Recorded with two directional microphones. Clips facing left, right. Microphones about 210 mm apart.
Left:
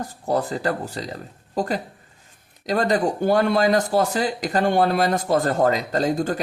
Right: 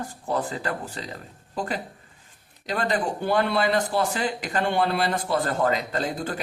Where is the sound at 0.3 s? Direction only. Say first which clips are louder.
Left 5 dB; 40° left (ahead or behind).